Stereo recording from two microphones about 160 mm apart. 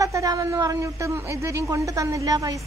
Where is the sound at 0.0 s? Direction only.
20° right (ahead or behind).